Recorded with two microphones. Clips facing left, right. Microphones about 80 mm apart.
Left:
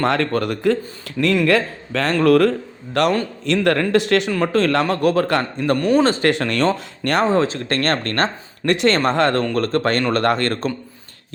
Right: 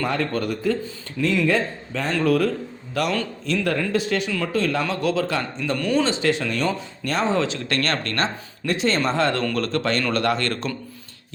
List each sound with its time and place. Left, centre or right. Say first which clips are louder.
0.0 s a man's voice: left 5 dB; left
2.1 s speech: left 6 dB; left
4.5 s a man's voice: left 6 dB; left
5.0 s speech: left 5 dB; left
5.8 s speech: left 5 dB; left
6.1 s speech: left 4 dB; left
7.3 s speech: left 4 dB; left
8.6 s speech: left 5 dB; left
9.4 s speech: left 4 dB; left